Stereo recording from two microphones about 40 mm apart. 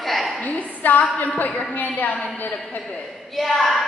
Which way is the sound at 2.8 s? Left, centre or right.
Left.